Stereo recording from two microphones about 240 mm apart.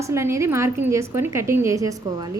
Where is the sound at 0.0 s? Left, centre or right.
Centre.